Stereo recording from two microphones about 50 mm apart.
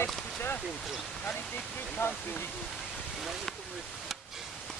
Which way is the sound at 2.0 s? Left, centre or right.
Left.